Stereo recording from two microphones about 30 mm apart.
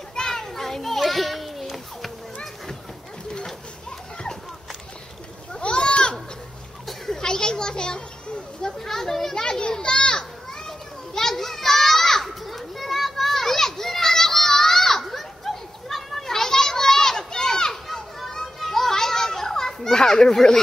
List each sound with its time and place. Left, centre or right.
0.3 s children playing: centre
5.6 s children playing: left
7.1 s children playing: left
8.6 s children playing: centre
9.4 s children playing: left
11.1 s children playing: centre
15.0 s children playing: centre
16.3 s children playing: centre
17.3 s a sound: centre
17.8 s children playing: centre